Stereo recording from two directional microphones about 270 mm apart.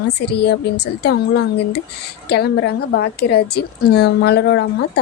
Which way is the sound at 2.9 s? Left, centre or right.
Left.